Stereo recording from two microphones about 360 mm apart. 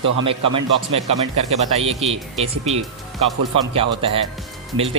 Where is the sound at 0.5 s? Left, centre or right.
Centre.